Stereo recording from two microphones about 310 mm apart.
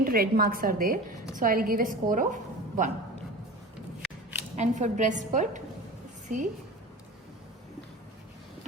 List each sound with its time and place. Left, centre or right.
0.0 s a woman's voice: right
4.5 s a woman's voice: right